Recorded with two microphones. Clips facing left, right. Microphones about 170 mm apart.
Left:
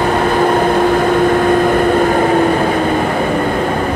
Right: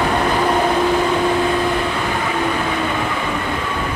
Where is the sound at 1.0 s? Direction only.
55° left (ahead or behind).